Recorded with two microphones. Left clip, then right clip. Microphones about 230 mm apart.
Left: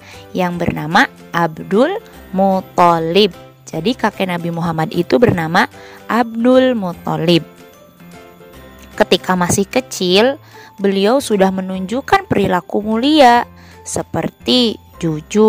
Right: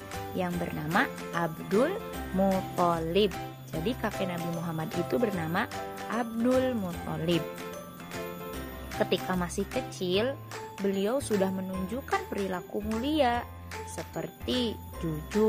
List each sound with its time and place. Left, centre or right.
0.4 s speech: left
9.0 s speech: left